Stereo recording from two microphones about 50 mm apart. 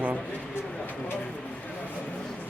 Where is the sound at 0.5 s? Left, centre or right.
Left.